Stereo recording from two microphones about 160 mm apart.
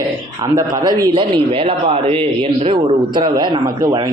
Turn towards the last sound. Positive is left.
turn(degrees=-30)  # may be behind; listen again after turning